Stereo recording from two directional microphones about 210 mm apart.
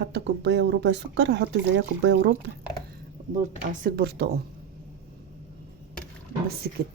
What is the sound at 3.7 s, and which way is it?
Speech, 45° right (ahead or behind).